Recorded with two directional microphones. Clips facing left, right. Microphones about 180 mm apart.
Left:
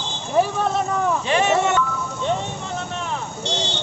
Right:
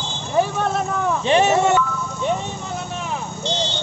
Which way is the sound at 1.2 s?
30° right (ahead or behind).